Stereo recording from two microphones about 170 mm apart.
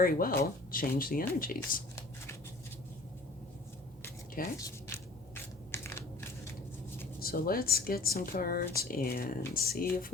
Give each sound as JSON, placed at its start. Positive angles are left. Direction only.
{"t": 0.0, "sound": "speech", "side_deg": 55}
{"t": 4.5, "sound": "a sound", "side_deg": 20}
{"t": 7.2, "sound": "speech", "side_deg": 60}